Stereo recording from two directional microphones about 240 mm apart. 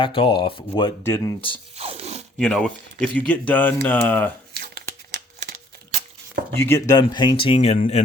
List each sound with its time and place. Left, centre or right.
0.0 s speech: left
1.7 s crunch: right
2.4 s speech: centre
4.5 s crumpling: right
6.6 s speech: centre; by 8.0 s left